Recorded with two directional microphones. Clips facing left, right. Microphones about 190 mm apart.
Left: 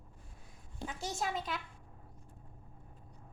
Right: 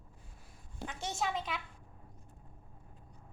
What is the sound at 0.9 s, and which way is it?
Speech, centre (ahead or behind).